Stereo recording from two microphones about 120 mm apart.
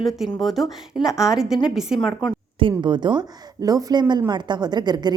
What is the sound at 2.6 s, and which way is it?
A woman's voice, 40° right (ahead or behind).